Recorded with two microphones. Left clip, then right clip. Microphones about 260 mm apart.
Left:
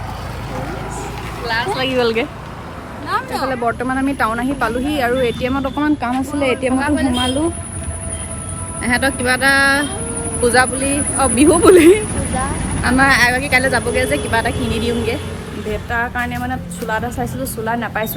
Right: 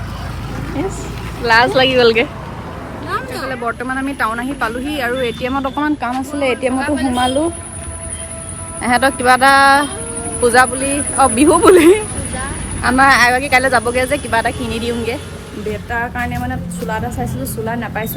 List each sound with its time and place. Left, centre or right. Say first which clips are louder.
1.7 s speech: right 6 dB; centre
3.5 s speech: even; centre
6.7 s speech: even; left
8.8 s speech: right 4 dB; right
15.7 s speech: left 1 dB; centre